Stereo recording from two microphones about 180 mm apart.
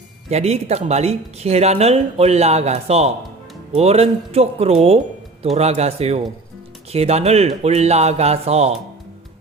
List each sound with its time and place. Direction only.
0.3 s speech: 35° right (ahead or behind)